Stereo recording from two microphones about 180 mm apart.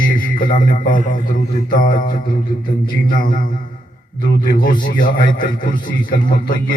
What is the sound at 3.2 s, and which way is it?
Speech, 50° left (ahead or behind).